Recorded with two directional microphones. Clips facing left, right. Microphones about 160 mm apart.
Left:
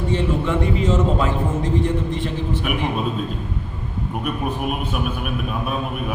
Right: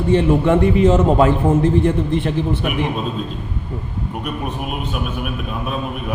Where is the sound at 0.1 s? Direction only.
55° right (ahead or behind).